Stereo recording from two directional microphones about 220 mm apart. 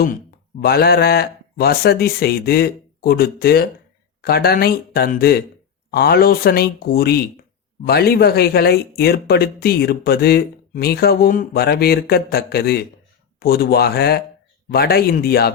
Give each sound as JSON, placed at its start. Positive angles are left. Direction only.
{"t": 0.6, "sound": "speech", "side_deg": 45}